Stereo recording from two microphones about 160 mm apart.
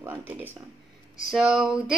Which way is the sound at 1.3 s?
5° right (ahead or behind).